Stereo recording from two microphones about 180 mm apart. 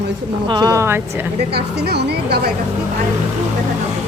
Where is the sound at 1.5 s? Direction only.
65° right (ahead or behind).